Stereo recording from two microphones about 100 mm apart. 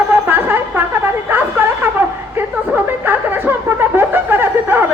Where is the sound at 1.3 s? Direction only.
20° right (ahead or behind).